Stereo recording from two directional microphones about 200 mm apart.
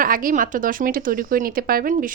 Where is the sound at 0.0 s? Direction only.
45° right (ahead or behind).